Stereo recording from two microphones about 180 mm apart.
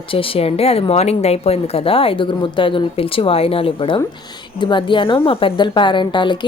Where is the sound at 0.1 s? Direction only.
30° left (ahead or behind).